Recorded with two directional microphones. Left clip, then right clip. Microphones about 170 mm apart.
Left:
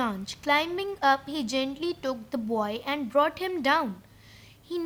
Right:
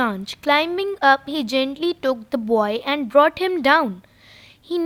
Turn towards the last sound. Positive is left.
turn(degrees=-50)  # may be behind; listen again after turning